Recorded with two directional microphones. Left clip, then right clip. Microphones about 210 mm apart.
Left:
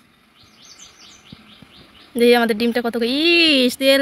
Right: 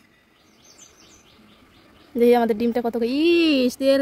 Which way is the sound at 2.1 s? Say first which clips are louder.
Left 3 dB; 20° right (ahead or behind).